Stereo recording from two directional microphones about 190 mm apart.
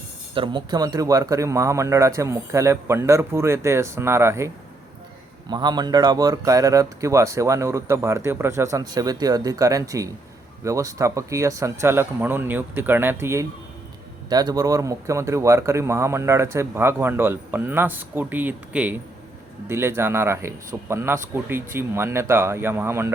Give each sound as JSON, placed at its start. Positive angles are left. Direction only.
{"t": 0.3, "sound": "speech", "side_deg": -25}